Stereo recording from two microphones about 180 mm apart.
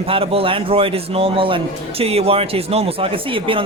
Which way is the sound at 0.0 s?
30° right (ahead or behind).